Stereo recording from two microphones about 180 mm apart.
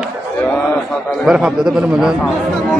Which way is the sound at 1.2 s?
5° right (ahead or behind).